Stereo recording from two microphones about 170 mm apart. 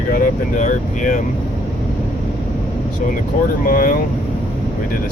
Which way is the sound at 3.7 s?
50° left (ahead or behind).